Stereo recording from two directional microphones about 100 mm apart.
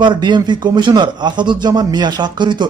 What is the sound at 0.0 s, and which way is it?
Speech, 50° right (ahead or behind).